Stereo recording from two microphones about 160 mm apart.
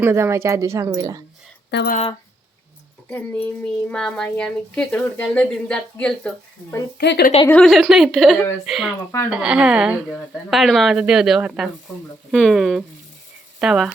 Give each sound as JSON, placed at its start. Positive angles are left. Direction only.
{"t": 0.0, "sound": "speech", "side_deg": -15}
{"t": 1.7, "sound": "a woman's voice", "side_deg": 90}
{"t": 3.1, "sound": "a woman's voice", "side_deg": 10}
{"t": 7.0, "sound": "a woman's voice", "side_deg": 90}
{"t": 7.6, "sound": "a woman's voice", "side_deg": 0}